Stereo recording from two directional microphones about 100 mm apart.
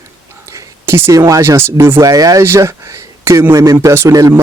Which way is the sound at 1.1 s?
35° right (ahead or behind).